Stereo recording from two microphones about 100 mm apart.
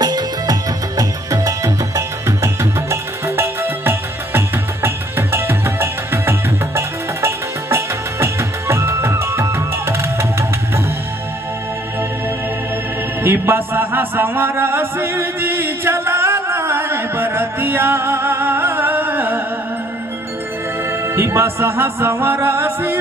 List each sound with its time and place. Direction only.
0.0 s music: 40° right (ahead or behind)
13.2 s music: 20° right (ahead or behind)
21.1 s music: 25° right (ahead or behind)